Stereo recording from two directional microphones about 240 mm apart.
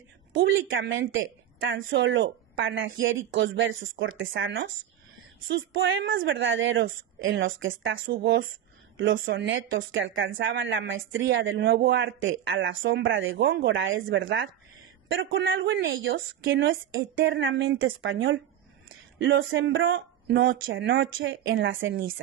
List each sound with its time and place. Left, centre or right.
0.4 s a woman's voice: right